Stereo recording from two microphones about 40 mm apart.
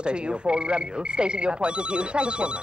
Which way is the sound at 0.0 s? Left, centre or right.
Right.